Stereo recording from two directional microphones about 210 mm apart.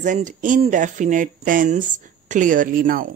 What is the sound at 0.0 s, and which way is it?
Speech, 35° right (ahead or behind).